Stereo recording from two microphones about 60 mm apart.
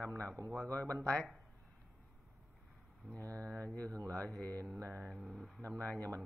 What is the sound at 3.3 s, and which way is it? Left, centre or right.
Mantra, left.